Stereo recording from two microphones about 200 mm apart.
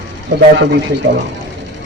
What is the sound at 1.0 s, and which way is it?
Speech, 65° right (ahead or behind).